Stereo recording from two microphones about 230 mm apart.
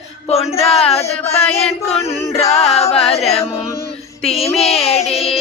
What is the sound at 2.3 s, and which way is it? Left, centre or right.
Male singing, left.